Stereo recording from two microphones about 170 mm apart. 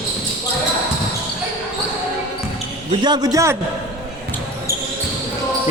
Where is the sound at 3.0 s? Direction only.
25° right (ahead or behind).